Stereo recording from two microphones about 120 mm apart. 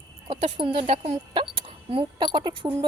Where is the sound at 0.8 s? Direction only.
65° right (ahead or behind).